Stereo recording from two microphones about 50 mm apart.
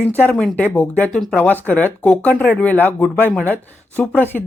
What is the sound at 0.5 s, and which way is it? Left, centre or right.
Speech, left.